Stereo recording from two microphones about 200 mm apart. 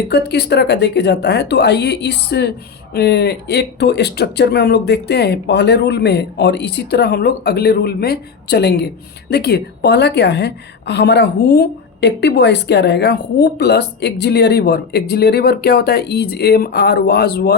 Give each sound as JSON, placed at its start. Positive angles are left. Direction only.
{"t": 0.1, "sound": "a woman's voice", "side_deg": 55}